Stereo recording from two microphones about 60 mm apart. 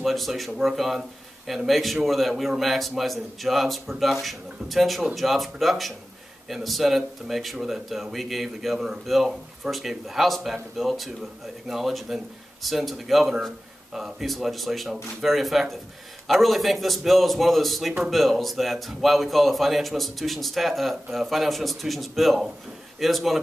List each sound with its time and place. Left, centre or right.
0.0 s a man's voice: centre
9.0 s a man's voice: centre